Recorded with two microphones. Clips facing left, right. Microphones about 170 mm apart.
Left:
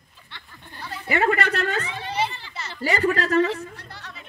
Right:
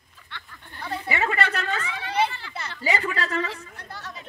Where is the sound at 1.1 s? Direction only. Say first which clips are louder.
Left 5 dB; 55° left (ahead or behind).